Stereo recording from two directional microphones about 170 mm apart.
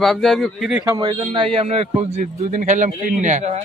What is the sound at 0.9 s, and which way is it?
A man's voice, 25° right (ahead or behind).